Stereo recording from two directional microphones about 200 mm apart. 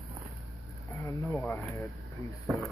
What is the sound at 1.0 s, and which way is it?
Snake, 10° left (ahead or behind).